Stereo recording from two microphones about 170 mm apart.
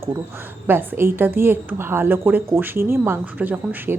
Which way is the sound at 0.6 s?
10° right (ahead or behind).